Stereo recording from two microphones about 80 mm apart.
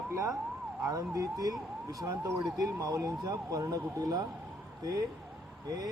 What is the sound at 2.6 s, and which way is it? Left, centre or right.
Speech, right.